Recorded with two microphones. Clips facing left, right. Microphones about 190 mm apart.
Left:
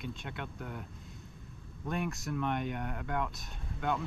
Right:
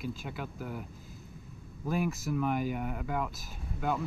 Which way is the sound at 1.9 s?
Centre (ahead or behind).